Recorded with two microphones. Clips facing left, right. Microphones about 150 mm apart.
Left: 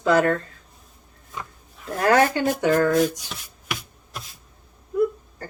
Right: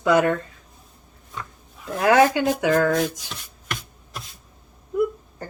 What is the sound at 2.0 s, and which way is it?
Speech, 10° right (ahead or behind).